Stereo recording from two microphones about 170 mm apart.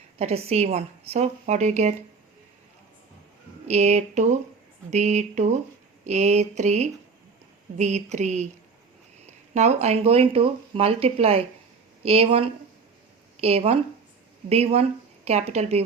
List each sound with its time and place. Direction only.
0.2 s speech: 35° right (ahead or behind)
3.7 s a sound: 40° right (ahead or behind)
9.2 s speech: 40° right (ahead or behind)